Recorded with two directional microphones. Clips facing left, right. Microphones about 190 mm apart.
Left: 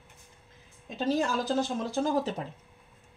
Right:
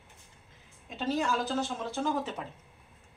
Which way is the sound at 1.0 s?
40° left (ahead or behind).